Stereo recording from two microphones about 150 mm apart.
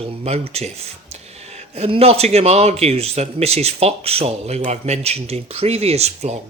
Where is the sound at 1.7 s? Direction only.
40° right (ahead or behind).